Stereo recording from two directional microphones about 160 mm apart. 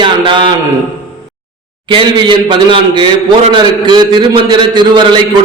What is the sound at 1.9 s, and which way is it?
A man's voice, 30° right (ahead or behind).